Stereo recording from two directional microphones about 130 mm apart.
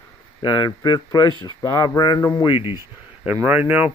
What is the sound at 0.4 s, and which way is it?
Speech, 30° left (ahead or behind).